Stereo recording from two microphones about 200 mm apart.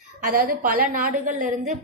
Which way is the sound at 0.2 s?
45° right (ahead or behind).